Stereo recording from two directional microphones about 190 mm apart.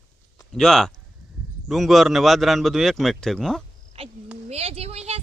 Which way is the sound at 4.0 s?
30° right (ahead or behind).